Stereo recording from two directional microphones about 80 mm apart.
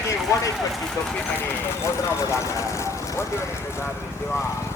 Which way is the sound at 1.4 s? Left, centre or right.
Left.